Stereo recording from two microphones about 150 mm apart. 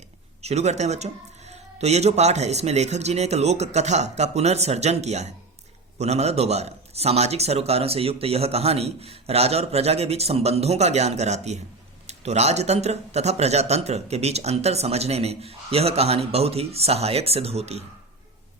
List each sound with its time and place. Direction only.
0.4 s a man's voice: 45° right (ahead or behind)